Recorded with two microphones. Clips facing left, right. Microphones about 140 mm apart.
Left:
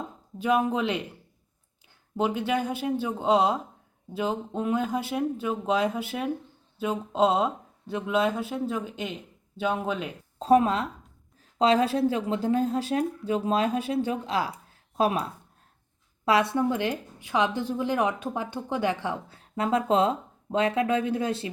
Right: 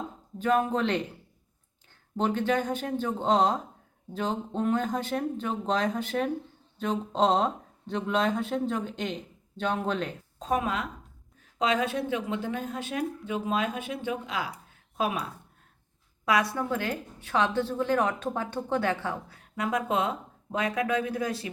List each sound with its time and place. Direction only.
0.3 s speech: 10° left (ahead or behind)
2.1 s speech: 10° left (ahead or behind)
10.3 s a woman's voice: 30° left (ahead or behind)
16.2 s a woman's voice: 25° left (ahead or behind)